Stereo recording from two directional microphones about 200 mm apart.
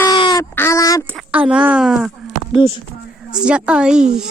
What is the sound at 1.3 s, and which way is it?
Speech, 5° right (ahead or behind).